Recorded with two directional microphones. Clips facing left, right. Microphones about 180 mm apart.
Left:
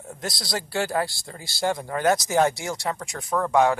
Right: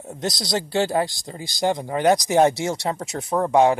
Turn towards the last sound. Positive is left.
turn(degrees=-20)  # may be behind; listen again after turning